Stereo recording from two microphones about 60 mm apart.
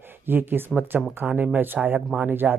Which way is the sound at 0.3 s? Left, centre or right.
Right.